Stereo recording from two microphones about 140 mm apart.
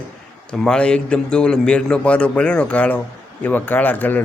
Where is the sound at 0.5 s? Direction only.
5° left (ahead or behind).